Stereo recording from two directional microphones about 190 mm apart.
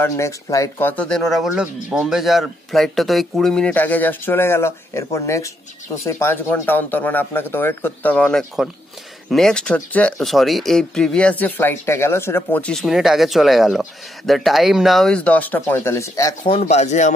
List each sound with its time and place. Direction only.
0.0 s speech: 15° left (ahead or behind)
16.5 s speech: 35° left (ahead or behind)